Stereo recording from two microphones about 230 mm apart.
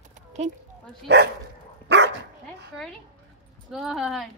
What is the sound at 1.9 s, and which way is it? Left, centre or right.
Dog, right.